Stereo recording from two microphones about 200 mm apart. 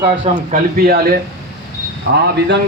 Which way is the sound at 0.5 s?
50° right (ahead or behind).